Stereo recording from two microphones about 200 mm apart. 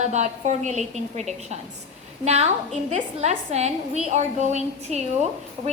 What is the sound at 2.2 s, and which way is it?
A woman's voice, 30° right (ahead or behind).